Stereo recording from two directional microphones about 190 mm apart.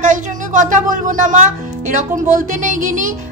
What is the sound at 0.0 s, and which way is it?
Speech, 40° right (ahead or behind).